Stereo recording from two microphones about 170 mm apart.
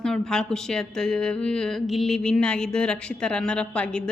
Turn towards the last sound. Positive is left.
turn(degrees=5)  # may be behind; listen again after turning